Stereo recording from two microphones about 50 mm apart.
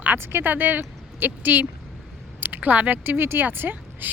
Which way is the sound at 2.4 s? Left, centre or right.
Right.